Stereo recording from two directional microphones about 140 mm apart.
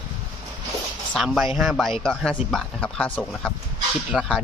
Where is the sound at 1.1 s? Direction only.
Centre (ahead or behind).